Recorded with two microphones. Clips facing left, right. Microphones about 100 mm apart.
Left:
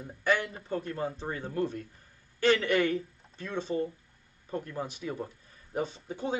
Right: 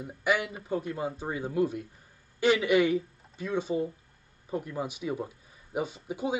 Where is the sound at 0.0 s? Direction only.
10° right (ahead or behind).